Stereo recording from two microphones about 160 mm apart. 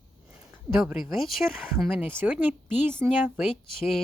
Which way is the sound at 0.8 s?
Centre (ahead or behind).